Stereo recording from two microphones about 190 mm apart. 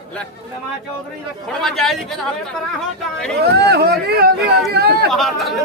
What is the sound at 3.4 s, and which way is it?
Speech, 60° right (ahead or behind).